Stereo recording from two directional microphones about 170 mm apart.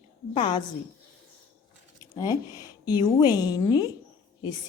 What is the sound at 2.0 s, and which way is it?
A woman's voice, 20° left (ahead or behind).